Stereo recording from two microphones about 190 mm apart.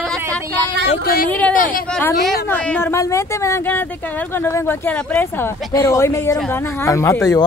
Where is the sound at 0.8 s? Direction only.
50° left (ahead or behind).